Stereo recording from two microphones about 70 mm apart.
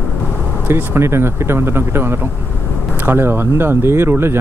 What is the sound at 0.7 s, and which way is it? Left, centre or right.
Speech, right.